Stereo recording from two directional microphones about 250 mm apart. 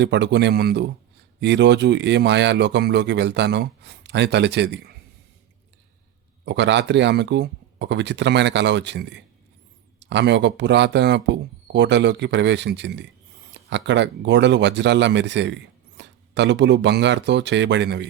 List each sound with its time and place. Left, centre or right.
0.0 s speech: right
6.4 s speech: right